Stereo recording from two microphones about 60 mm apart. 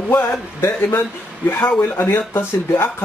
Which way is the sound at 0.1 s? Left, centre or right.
Left.